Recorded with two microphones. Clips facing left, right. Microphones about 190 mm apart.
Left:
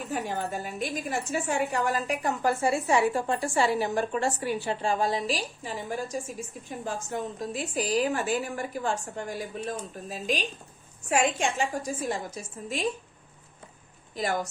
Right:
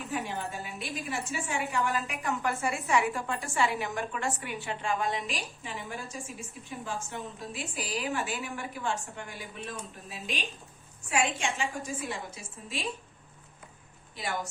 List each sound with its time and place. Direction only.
0.1 s a woman's voice: 40° left (ahead or behind)